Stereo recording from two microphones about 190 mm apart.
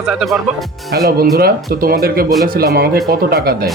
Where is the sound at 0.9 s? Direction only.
55° right (ahead or behind).